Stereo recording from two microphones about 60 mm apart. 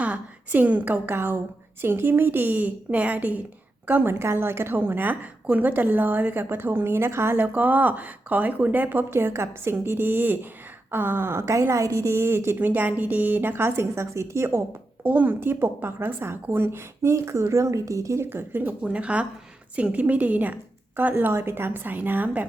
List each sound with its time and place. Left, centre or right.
0.0 s a woman's voice: right
4.1 s a woman's voice: right
4.8 s a woman's voice: right
7.3 s speech: right
9.0 s a woman's voice: right
12.5 s a woman's voice: right
15.0 s a woman's voice: right
17.0 s speech: right
18.3 s a woman's voice: right
18.8 s a woman's voice: centre